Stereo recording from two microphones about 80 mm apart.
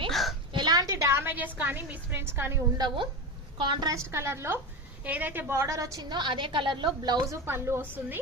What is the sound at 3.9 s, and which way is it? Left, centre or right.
Speech, right.